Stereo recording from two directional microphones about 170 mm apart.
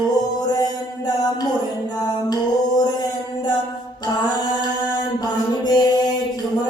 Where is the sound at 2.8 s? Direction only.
25° left (ahead or behind).